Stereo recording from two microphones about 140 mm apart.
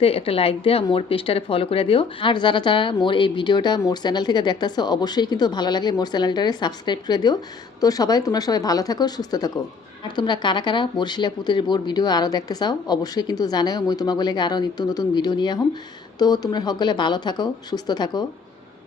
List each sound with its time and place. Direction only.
0.0 s speech: 45° left (ahead or behind)